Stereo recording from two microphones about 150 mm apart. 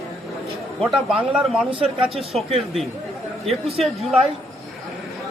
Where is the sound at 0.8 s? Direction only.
Centre (ahead or behind).